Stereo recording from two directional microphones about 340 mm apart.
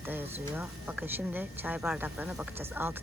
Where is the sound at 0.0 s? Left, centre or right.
Centre.